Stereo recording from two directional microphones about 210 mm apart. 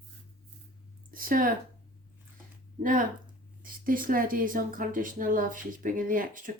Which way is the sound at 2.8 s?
40° right (ahead or behind).